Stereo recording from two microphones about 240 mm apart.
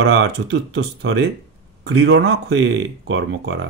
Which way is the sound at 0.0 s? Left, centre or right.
Right.